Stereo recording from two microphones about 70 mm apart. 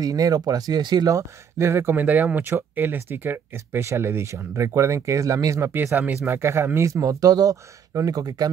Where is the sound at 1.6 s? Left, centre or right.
Right.